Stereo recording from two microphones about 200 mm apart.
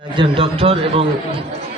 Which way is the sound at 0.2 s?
30° right (ahead or behind).